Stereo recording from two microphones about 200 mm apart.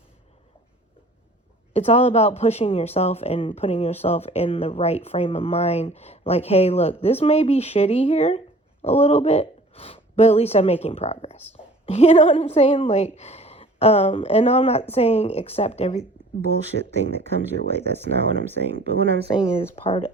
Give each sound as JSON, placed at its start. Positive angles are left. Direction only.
{"t": 1.7, "sound": "a woman's voice", "side_deg": 30}
{"t": 16.7, "sound": "speech", "side_deg": -60}